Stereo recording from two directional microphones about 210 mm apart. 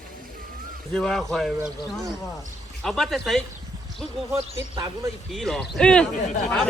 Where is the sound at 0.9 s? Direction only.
Centre (ahead or behind).